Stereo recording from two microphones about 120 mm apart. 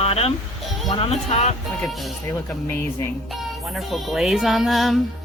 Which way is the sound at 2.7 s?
20° left (ahead or behind).